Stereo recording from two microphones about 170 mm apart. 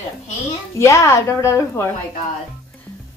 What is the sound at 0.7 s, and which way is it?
Speech, 15° left (ahead or behind).